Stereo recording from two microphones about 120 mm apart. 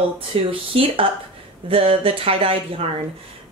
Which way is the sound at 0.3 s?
50° right (ahead or behind).